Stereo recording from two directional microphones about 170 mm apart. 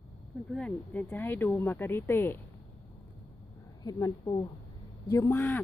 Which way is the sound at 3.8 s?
20° left (ahead or behind).